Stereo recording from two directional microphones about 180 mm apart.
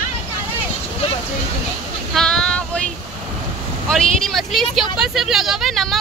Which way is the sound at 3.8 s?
Centre (ahead or behind).